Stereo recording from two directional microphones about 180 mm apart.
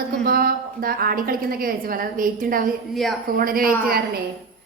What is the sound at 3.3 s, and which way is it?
Speech, 55° right (ahead or behind).